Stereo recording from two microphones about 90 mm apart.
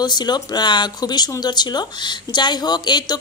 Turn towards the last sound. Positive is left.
turn(degrees=50)  # may be behind; listen again after turning